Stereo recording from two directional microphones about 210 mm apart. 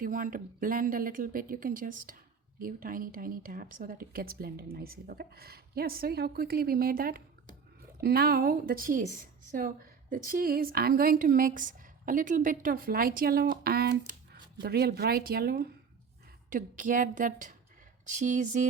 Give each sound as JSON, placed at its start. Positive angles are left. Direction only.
{"t": 0.0, "sound": "a woman's voice", "side_deg": -40}